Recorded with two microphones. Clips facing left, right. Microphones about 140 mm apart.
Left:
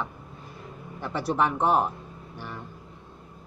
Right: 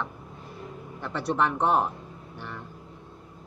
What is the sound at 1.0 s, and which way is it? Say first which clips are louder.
Speech: left 1 dB; 5° left (ahead or behind).